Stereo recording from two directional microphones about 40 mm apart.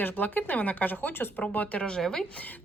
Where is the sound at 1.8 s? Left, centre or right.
Centre.